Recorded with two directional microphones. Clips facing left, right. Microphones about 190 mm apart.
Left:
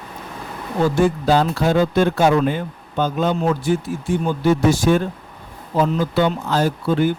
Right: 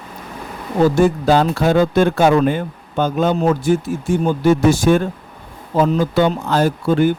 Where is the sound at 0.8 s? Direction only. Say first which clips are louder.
Right 4 dB; 50° right (ahead or behind).